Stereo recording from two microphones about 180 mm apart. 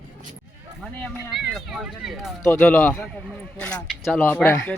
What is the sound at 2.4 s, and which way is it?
Speech, 15° left (ahead or behind).